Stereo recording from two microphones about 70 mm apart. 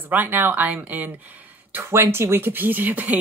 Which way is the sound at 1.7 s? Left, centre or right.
Right.